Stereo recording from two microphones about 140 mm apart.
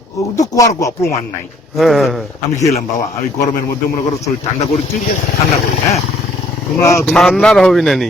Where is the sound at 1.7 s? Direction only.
Centre (ahead or behind).